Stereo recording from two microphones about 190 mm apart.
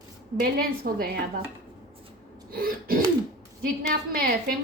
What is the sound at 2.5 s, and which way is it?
A woman's voice, 50° right (ahead or behind).